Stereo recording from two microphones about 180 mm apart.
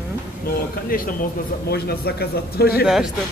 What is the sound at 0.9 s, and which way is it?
A man's voice, 50° left (ahead or behind).